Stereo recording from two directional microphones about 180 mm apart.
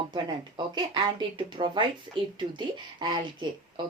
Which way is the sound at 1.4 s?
25° right (ahead or behind).